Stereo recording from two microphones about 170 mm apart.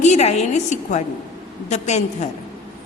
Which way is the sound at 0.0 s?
40° left (ahead or behind).